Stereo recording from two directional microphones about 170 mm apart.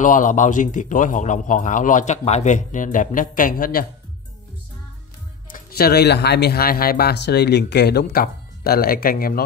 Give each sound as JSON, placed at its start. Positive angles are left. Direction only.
{"t": 0.0, "sound": "a man's voice", "side_deg": 50}
{"t": 5.5, "sound": "speech", "side_deg": 65}